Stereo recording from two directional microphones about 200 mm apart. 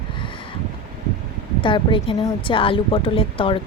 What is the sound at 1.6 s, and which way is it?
A woman's voice, 25° left (ahead or behind).